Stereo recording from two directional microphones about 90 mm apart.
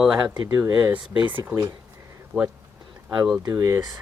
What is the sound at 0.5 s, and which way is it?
Speech, 30° right (ahead or behind).